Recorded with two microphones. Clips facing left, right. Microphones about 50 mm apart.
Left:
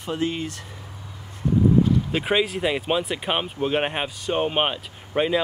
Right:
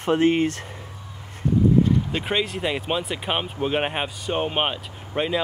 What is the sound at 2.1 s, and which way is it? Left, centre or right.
Speech, centre.